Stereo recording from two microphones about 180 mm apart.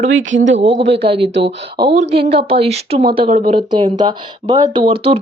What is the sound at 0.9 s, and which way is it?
Speech, 30° right (ahead or behind).